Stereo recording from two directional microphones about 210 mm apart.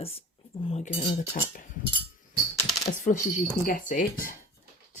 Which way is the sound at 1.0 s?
40° left (ahead or behind).